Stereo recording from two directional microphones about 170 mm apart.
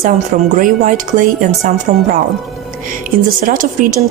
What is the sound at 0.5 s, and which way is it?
A woman's voice, 50° right (ahead or behind).